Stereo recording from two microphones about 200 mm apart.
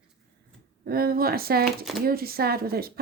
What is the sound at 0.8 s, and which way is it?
Speech, 50° right (ahead or behind).